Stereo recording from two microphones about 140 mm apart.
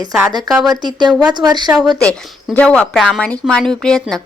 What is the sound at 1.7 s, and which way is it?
Speech, centre (ahead or behind).